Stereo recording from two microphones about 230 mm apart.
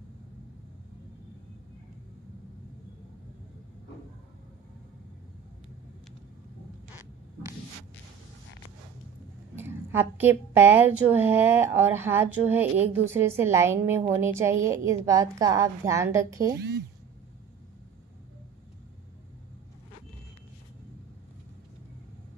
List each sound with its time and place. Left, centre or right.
9.6 s a woman's voice: centre
16.5 s speech: right